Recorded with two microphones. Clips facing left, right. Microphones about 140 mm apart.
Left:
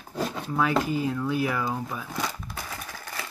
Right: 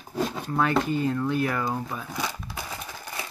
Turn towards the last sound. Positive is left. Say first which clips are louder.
# right 1 dB
turn(degrees=-15)  # may be behind; listen again after turning